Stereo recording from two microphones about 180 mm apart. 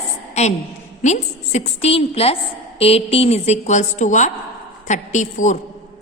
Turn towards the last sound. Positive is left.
turn(degrees=40)  # may be behind; listen again after turning